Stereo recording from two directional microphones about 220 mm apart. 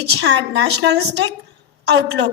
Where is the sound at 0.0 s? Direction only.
50° right (ahead or behind).